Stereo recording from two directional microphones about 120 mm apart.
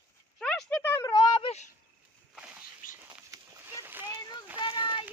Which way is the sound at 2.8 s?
90° left.